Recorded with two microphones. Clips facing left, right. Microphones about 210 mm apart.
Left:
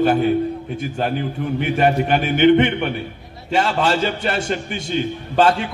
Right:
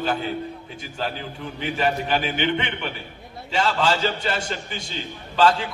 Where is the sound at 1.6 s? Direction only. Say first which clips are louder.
Left 6 dB; 55° left (ahead or behind).